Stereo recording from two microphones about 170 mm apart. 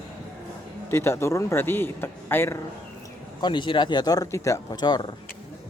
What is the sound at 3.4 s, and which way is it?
Speech, 25° left (ahead or behind).